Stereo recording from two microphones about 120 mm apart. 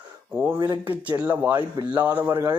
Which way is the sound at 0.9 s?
15° right (ahead or behind).